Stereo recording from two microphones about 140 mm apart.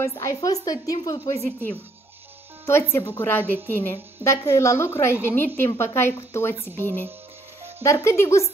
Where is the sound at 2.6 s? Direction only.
20° left (ahead or behind).